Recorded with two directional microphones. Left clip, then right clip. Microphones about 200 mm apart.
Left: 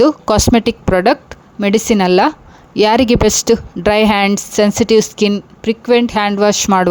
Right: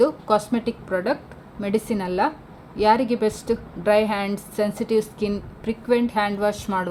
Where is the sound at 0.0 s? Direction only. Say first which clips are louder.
Left 8 dB; 50° left (ahead or behind).